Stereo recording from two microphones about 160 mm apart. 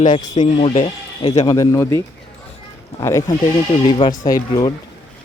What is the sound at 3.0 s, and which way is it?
Speech, 15° left (ahead or behind).